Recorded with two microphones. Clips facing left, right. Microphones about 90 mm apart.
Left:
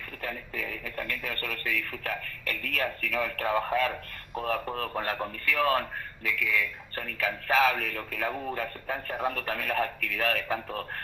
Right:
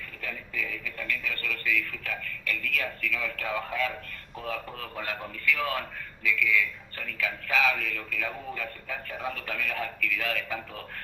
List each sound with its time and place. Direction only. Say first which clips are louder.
0.2 s a man's voice: left 1 dB; 45° left (ahead or behind)